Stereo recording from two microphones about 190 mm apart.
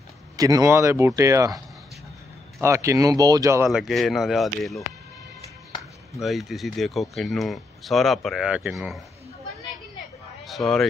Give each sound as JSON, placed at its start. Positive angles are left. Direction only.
{"t": 0.4, "sound": "speech", "side_deg": -20}
{"t": 2.6, "sound": "speech", "side_deg": -15}
{"t": 3.6, "sound": "speech", "side_deg": 0}
{"t": 6.2, "sound": "speech", "side_deg": 0}
{"t": 10.4, "sound": "a sound", "side_deg": 0}